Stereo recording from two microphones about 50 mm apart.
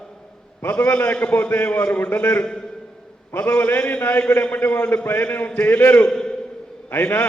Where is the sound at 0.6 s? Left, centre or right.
Left.